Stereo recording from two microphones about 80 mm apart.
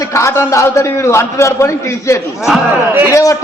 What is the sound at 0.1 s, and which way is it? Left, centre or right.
A man's voice, left.